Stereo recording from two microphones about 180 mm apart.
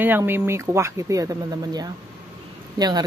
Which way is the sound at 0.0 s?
10° right (ahead or behind).